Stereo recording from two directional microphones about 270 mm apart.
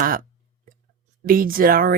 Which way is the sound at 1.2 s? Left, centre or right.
Right.